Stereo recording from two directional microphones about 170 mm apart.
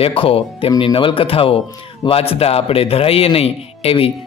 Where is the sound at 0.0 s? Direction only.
35° left (ahead or behind).